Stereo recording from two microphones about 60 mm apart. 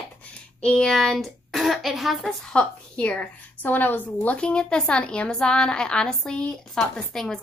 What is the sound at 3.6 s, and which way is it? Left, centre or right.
A woman's voice, left.